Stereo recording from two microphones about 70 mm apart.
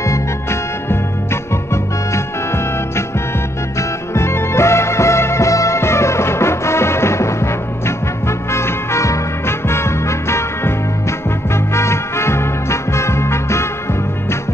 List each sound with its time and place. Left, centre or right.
0.0 s music: left
4.1 s music: left